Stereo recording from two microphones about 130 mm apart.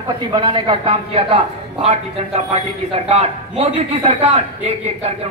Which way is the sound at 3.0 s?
55° right (ahead or behind).